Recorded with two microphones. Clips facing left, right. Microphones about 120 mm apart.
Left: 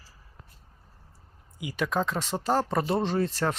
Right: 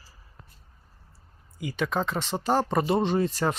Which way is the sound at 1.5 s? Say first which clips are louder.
Even; 5° left (ahead or behind).